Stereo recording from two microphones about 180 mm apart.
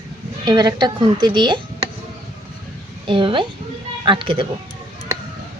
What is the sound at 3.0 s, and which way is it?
Speech, 30° right (ahead or behind).